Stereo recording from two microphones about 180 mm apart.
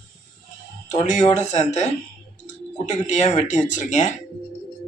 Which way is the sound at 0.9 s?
40° left (ahead or behind).